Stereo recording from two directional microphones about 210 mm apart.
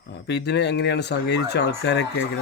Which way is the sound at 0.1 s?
55° left (ahead or behind).